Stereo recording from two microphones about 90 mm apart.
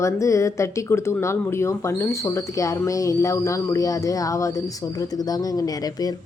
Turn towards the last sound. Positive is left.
turn(degrees=45)  # may be behind; listen again after turning